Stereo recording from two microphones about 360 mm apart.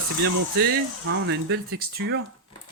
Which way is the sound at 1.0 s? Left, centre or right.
Right.